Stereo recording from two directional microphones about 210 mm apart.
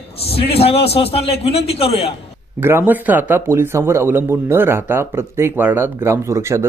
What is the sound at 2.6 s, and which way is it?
Speech, 10° right (ahead or behind).